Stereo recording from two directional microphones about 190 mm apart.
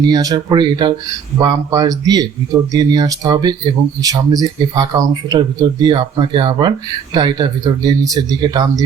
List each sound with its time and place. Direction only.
0.0 s speech: 20° right (ahead or behind)